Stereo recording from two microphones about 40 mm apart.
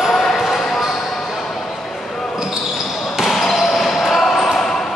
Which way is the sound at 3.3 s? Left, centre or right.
Centre.